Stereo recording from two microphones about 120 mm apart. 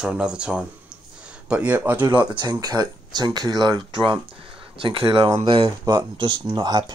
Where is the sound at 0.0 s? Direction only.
5° right (ahead or behind).